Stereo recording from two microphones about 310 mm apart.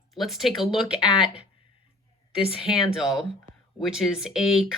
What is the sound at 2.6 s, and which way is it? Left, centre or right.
Speech, centre.